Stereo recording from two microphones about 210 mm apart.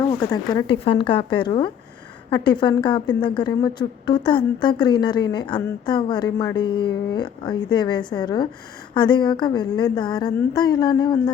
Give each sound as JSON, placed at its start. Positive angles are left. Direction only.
{"t": 0.0, "sound": "speech", "side_deg": 15}